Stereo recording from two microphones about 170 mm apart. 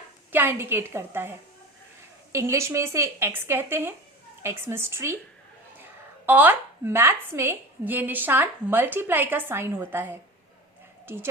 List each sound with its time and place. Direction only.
0.3 s speech: 15° right (ahead or behind)
2.3 s speech: 15° right (ahead or behind)